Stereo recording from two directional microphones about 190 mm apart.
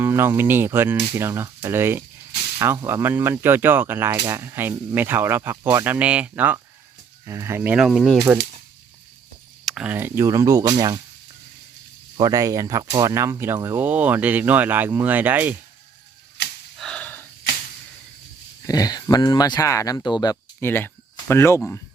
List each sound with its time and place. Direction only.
0.0 s speech: 10° right (ahead or behind)
9.6 s speech: 5° right (ahead or behind); by 11.0 s 20° right (ahead or behind)
12.1 s speech: 20° right (ahead or behind)
16.7 s a sound: 5° left (ahead or behind)
18.6 s speech: 20° left (ahead or behind)